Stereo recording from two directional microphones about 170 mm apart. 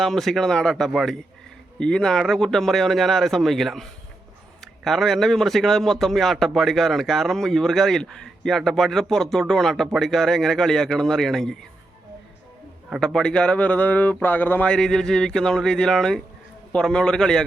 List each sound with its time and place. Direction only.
0.0 s a man's voice: centre (ahead or behind)
13.1 s a man's voice: 5° left (ahead or behind)